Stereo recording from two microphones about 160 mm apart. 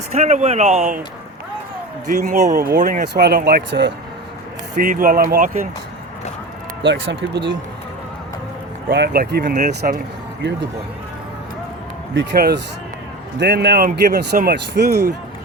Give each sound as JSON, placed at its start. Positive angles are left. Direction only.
{"t": 0.1, "sound": "speech", "side_deg": -45}
{"t": 2.2, "sound": "speech", "side_deg": -50}
{"t": 2.6, "sound": "speech", "side_deg": -65}
{"t": 3.2, "sound": "speech", "side_deg": -90}
{"t": 4.8, "sound": "speech", "side_deg": -60}
{"t": 6.8, "sound": "speech", "side_deg": -90}
{"t": 8.9, "sound": "speech", "side_deg": -80}
{"t": 12.1, "sound": "speech", "side_deg": -90}